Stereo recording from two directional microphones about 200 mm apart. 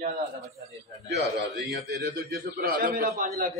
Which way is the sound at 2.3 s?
50° right (ahead or behind).